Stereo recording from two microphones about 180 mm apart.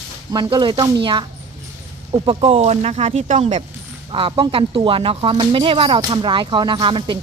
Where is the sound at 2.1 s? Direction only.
30° right (ahead or behind).